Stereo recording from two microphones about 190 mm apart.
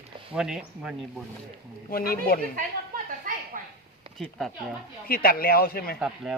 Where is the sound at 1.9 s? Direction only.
50° left (ahead or behind).